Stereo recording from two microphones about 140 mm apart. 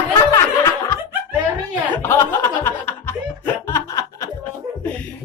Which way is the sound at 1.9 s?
20° left (ahead or behind).